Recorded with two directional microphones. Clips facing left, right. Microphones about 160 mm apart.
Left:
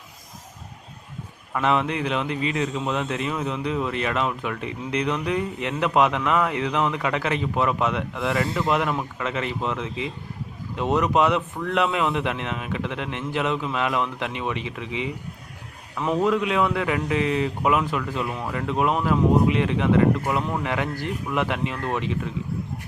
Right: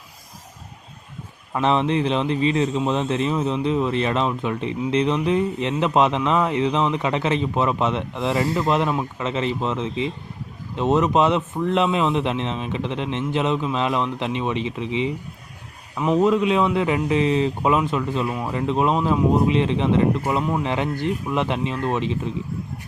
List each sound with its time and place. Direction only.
1.5 s a man's voice: 25° right (ahead or behind)
16.2 s a man's voice: 20° right (ahead or behind)